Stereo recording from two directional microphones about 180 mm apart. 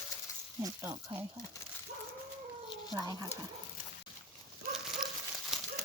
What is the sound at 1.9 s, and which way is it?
Dog, 70° right (ahead or behind).